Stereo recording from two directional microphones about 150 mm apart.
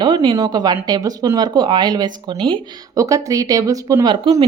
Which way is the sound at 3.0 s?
20° right (ahead or behind).